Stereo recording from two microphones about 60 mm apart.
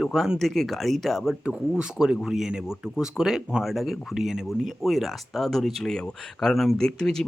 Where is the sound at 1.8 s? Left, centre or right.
Centre.